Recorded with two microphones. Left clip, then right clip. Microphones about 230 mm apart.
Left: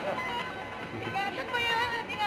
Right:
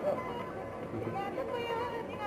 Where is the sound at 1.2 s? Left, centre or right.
Centre.